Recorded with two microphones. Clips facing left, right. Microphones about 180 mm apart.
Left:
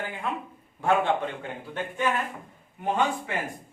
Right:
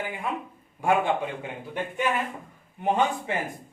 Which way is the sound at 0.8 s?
10° right (ahead or behind).